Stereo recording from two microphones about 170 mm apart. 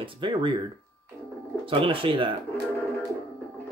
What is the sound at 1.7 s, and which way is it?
Speech, 30° right (ahead or behind).